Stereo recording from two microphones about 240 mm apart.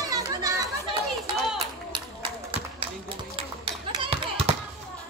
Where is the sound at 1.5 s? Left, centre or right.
Right.